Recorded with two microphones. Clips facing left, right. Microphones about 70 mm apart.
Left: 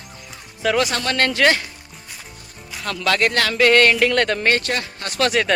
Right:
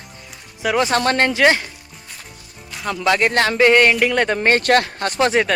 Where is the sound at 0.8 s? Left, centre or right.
Right.